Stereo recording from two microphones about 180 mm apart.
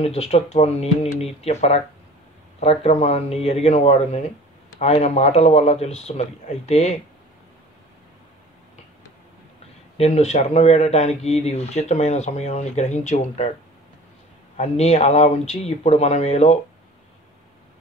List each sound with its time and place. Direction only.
0.0 s speech: 35° left (ahead or behind)
9.9 s speech: 35° left (ahead or behind)
14.6 s speech: 35° left (ahead or behind)